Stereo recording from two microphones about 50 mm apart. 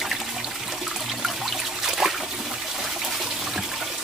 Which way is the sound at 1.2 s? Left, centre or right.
Centre.